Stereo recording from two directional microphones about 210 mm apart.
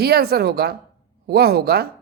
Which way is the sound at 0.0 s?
50° right (ahead or behind).